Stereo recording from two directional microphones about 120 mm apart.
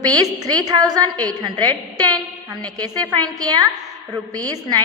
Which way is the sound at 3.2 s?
35° right (ahead or behind).